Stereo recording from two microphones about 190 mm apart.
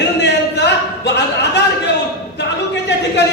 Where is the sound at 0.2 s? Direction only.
65° left (ahead or behind).